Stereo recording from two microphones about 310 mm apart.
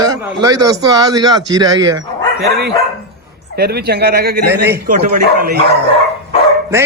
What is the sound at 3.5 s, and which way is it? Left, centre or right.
Speech, right.